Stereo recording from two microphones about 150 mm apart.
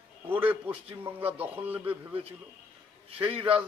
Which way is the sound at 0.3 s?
10° right (ahead or behind).